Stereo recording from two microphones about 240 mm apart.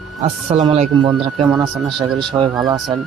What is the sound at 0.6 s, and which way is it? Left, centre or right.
A man's voice, centre.